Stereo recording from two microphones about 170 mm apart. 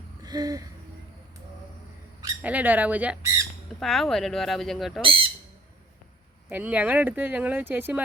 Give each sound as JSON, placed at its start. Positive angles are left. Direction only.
{"t": 0.2, "sound": "a sound", "side_deg": -20}
{"t": 2.4, "sound": "speech", "side_deg": -10}
{"t": 5.0, "sound": "speech", "side_deg": -30}
{"t": 6.5, "sound": "speech", "side_deg": -10}